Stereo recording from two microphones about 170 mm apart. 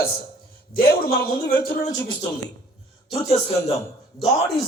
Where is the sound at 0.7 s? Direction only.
60° left (ahead or behind).